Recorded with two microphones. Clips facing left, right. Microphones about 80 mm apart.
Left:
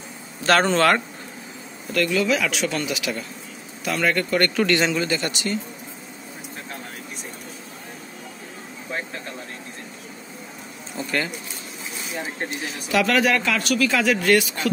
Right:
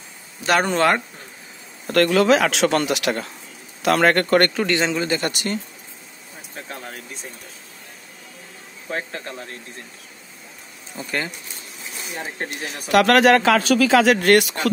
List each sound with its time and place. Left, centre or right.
0.4 s speech: centre
1.9 s a man's voice: right
4.6 s a man's voice: centre
5.1 s speech: right
11.0 s a man's voice: centre
12.4 s speech: right
13.0 s speech: right
14.1 s a man's voice: right